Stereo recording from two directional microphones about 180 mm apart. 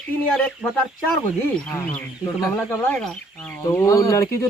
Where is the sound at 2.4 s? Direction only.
10° left (ahead or behind).